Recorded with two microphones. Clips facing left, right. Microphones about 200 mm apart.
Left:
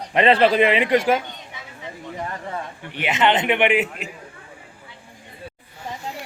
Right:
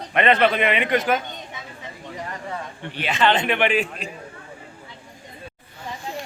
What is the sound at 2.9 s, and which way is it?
A man's voice, 20° left (ahead or behind).